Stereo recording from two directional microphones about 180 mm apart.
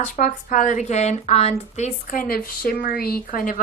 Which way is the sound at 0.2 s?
50° left (ahead or behind).